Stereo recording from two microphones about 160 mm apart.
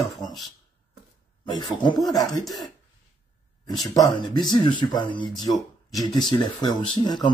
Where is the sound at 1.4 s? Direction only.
30° left (ahead or behind).